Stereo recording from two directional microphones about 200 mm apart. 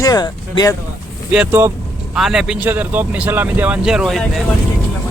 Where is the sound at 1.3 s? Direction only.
10° right (ahead or behind).